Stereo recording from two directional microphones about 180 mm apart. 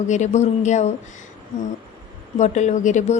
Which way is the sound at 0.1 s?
40° left (ahead or behind).